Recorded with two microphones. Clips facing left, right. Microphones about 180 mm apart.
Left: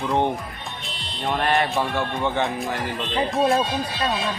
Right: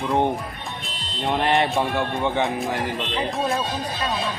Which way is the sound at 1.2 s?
20° right (ahead or behind).